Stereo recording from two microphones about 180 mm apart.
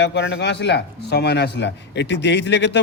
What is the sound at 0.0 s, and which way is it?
Speech, 75° left (ahead or behind).